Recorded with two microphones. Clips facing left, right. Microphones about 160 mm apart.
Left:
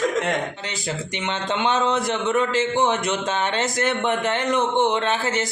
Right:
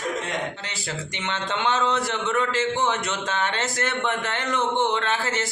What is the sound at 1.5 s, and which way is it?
A man's voice, 15° left (ahead or behind).